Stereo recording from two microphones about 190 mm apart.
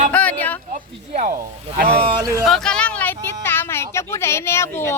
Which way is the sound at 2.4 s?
Centre (ahead or behind).